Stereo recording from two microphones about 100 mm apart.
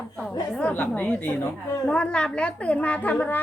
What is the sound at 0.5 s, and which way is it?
A woman's voice, 15° left (ahead or behind).